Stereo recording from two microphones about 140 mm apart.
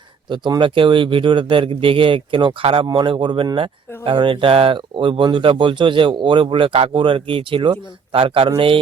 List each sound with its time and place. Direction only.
0.3 s speech: 35° right (ahead or behind)